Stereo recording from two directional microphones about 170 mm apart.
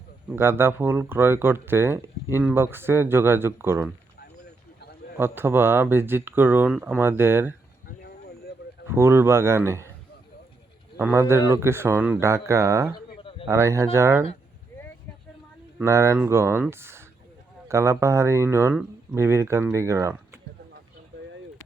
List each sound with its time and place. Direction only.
0.3 s speech: 15° right (ahead or behind)
5.1 s speech: 10° right (ahead or behind)
8.9 s speech: 15° right (ahead or behind)
10.9 s speech: 15° right (ahead or behind)
15.8 s speech: 15° right (ahead or behind)